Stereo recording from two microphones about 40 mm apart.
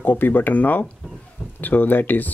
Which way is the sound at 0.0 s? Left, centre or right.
Left.